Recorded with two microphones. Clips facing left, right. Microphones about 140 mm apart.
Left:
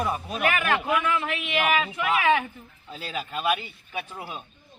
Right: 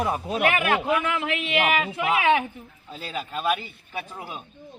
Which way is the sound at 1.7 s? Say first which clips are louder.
Right 1 dB; 20° right (ahead or behind).